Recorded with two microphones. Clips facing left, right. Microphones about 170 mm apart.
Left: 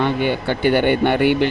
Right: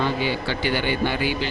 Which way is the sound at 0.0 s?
55° left (ahead or behind).